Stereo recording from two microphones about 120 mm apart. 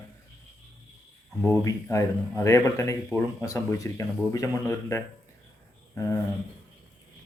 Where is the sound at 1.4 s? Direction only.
25° left (ahead or behind).